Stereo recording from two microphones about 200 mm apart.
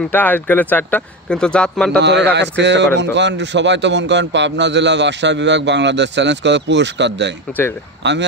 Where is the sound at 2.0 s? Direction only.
60° right (ahead or behind).